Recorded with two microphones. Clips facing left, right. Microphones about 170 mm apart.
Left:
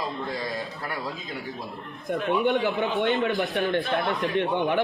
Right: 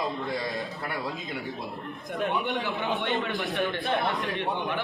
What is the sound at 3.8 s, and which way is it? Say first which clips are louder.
Speech: left 1 dB; 20° right (ahead or behind).